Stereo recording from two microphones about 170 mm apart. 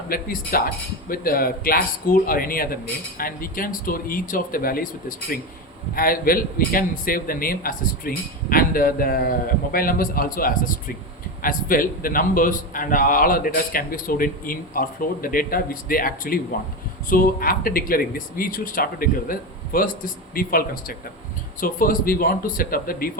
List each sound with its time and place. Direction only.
0.1 s a man's voice: 60° left (ahead or behind)